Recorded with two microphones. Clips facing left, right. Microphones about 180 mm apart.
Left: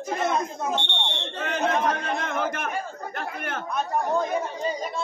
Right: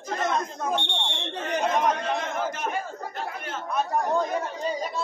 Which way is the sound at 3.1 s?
60° left (ahead or behind).